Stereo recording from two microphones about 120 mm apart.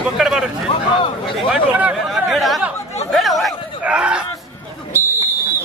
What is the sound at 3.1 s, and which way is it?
Chatter, centre (ahead or behind).